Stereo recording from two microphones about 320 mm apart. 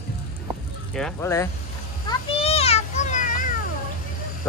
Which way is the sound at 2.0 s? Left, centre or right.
Centre.